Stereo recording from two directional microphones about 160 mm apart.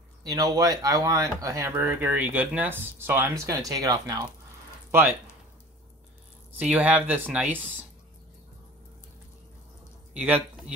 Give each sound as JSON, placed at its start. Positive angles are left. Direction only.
{"t": 0.2, "sound": "speech", "side_deg": -20}
{"t": 6.5, "sound": "speech", "side_deg": -10}
{"t": 10.1, "sound": "speech", "side_deg": -10}